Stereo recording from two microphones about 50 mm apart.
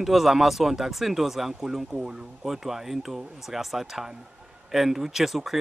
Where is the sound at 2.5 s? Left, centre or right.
Centre.